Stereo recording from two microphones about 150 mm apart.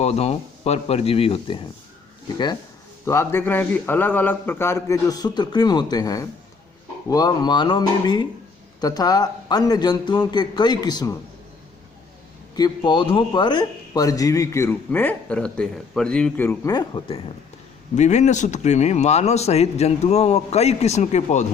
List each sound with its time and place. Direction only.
0.0 s speech: 45° left (ahead or behind)
3.0 s a man's voice: 20° left (ahead or behind)
12.5 s a man's voice: 30° left (ahead or behind); by 16.5 s 5° left (ahead or behind)
16.5 s a man's voice: 25° left (ahead or behind)
17.9 s speech: 50° left (ahead or behind)